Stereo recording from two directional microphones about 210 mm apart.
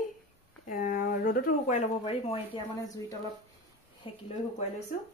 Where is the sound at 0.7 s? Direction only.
40° left (ahead or behind).